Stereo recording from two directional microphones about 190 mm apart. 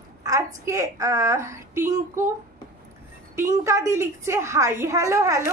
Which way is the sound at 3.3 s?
15° right (ahead or behind).